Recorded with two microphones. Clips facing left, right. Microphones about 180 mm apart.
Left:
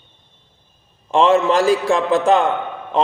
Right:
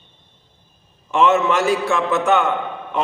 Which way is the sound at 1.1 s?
30° left (ahead or behind).